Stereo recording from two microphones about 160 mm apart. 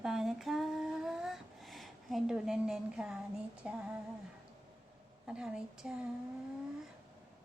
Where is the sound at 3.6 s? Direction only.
5° right (ahead or behind).